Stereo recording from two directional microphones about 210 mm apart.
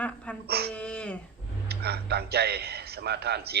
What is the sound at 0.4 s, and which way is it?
Speech, 50° right (ahead or behind).